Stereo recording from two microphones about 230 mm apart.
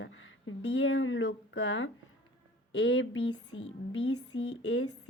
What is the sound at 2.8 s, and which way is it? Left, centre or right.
Music, left.